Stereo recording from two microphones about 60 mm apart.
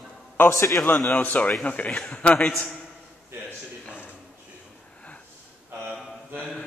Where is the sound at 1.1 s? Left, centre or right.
Left.